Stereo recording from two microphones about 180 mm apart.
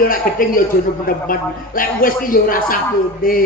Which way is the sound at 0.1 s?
50° left (ahead or behind).